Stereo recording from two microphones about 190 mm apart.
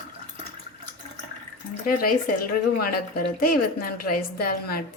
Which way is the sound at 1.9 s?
50° left (ahead or behind).